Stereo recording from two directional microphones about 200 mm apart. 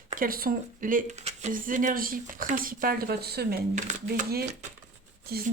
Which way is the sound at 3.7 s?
40° right (ahead or behind).